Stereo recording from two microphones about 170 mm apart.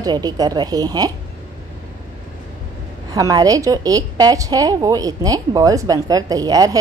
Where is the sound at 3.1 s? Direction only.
20° right (ahead or behind).